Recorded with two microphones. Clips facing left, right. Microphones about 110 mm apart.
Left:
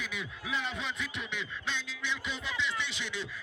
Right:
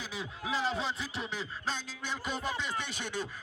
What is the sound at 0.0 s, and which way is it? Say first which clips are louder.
Music: right 1 dB; 30° right (ahead or behind).